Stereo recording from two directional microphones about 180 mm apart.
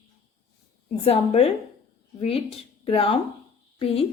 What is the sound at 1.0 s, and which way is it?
Speech, 35° left (ahead or behind).